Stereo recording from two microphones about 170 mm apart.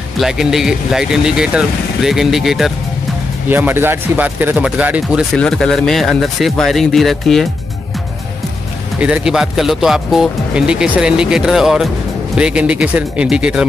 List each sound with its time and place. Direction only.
0.2 s speech: centre (ahead or behind)
3.4 s speech: 10° right (ahead or behind)
5.3 s speech: centre (ahead or behind)
9.0 s speech: 5° right (ahead or behind)